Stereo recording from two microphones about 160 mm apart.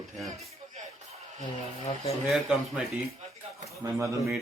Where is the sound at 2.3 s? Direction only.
Centre (ahead or behind).